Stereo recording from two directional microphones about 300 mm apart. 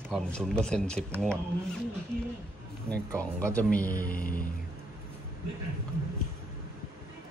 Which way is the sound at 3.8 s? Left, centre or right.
Left.